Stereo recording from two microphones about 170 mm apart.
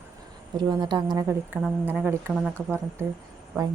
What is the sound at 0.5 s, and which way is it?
A woman's voice, 25° right (ahead or behind).